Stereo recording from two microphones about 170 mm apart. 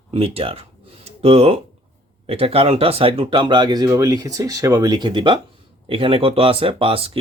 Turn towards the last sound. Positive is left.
turn(degrees=-30)  # may be behind; listen again after turning